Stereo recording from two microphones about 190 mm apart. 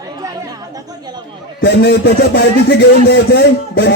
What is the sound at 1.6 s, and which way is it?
A man's voice, 60° left (ahead or behind).